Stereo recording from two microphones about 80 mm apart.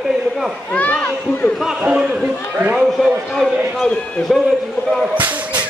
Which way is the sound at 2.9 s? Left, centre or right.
Centre.